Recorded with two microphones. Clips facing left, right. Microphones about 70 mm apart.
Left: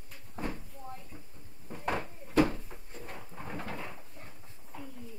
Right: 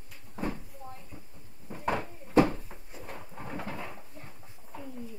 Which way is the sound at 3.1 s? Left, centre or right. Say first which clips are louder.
Right 3 dB; centre.